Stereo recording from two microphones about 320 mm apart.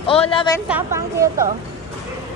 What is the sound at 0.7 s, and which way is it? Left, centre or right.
Speech, centre.